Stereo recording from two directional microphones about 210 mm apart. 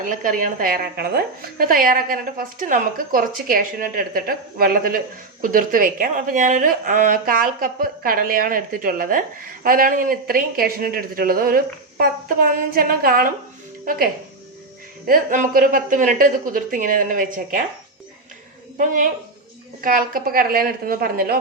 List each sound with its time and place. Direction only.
0.0 s speech: 40° right (ahead or behind)
15.0 s speech: 40° right (ahead or behind)
19.8 s speech: 40° right (ahead or behind)